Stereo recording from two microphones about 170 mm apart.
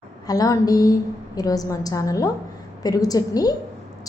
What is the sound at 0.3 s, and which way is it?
A woman's voice, 20° left (ahead or behind).